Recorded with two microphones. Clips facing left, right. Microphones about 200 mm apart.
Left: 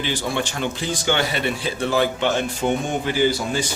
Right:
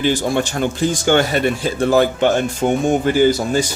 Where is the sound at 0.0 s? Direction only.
45° right (ahead or behind).